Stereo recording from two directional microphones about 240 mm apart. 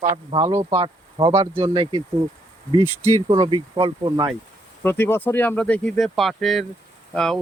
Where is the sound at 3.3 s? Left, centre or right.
Right.